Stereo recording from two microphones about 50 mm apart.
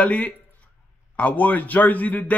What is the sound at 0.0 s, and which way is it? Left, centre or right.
A man's voice, left.